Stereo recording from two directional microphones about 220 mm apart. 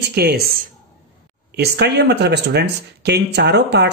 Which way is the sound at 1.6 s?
50° right (ahead or behind).